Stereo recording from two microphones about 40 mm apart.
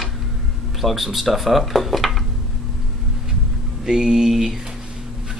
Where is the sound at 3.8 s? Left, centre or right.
Centre.